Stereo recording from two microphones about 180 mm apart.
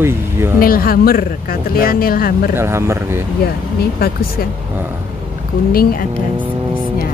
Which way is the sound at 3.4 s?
60° left (ahead or behind).